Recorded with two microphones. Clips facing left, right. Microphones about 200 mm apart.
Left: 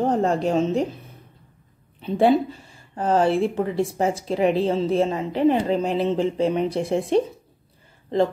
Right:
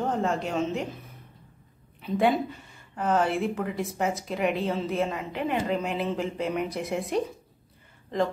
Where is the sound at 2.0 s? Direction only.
30° left (ahead or behind).